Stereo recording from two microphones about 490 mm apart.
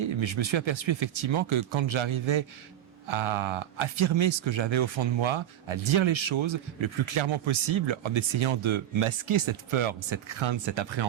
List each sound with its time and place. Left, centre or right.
0.0 s speech: right